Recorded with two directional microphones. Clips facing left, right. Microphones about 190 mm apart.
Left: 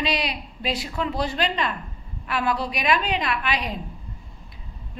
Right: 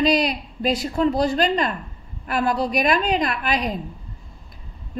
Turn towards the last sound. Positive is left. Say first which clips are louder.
# right 3 dB
turn(degrees=-40)  # may be behind; listen again after turning